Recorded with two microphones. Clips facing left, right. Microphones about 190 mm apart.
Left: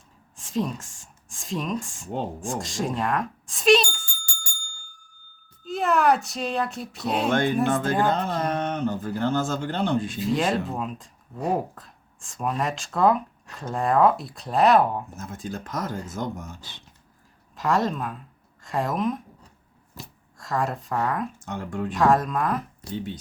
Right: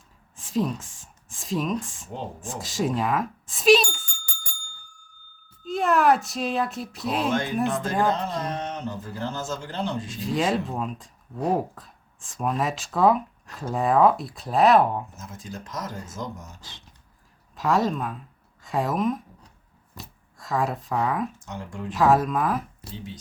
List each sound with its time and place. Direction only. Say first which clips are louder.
0.3 s speech: right 1 dB; centre (ahead or behind)
5.6 s speech: right 1 dB; centre (ahead or behind)
7.3 s speech: left 5 dB; 55° left (ahead or behind)
7.8 s speech: left 1 dB; centre (ahead or behind)
8.1 s speech: left 3 dB; 55° left (ahead or behind)
10.2 s speech: left 1 dB; centre (ahead or behind)
15.1 s speech: left 4 dB; 55° left (ahead or behind)
17.6 s speech: right 1 dB; centre (ahead or behind)
21.4 s speech: left 5 dB; 55° left (ahead or behind)
21.9 s speech: right 1 dB; 5° right (ahead or behind)